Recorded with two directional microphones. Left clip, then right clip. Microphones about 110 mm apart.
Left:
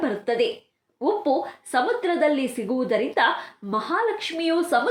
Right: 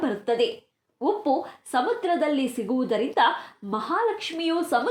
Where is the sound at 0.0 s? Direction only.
20° right (ahead or behind).